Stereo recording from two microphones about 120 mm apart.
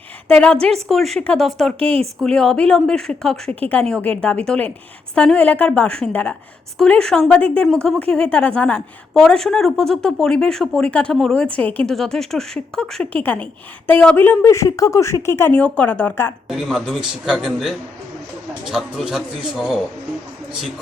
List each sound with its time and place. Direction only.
0.3 s a woman's voice: 10° left (ahead or behind)
1.8 s speech: 50° right (ahead or behind)
2.2 s a woman's voice: 5° left (ahead or behind)
16.5 s a woman's voice: centre (ahead or behind)